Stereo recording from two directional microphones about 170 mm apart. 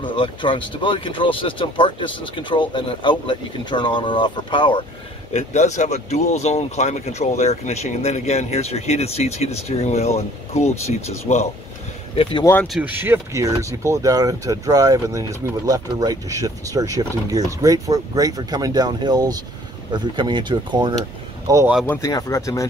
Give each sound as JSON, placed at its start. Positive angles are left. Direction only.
{"t": 0.0, "sound": "speech", "side_deg": 30}
{"t": 5.3, "sound": "speech", "side_deg": 45}
{"t": 12.2, "sound": "speech", "side_deg": 30}
{"t": 12.6, "sound": "speech", "side_deg": -5}
{"t": 22.0, "sound": "speech", "side_deg": 20}